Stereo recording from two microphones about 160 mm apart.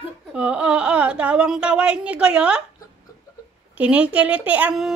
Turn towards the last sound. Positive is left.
turn(degrees=-5)  # may be behind; listen again after turning